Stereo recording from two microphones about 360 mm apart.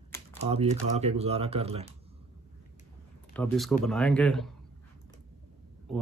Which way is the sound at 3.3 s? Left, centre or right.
Centre.